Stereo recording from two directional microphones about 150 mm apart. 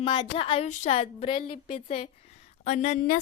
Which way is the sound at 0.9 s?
40° left (ahead or behind).